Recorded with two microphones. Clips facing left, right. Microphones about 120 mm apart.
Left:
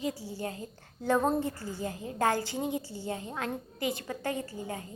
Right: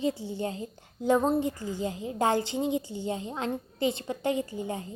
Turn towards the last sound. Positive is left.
turn(degrees=-25)  # may be behind; listen again after turning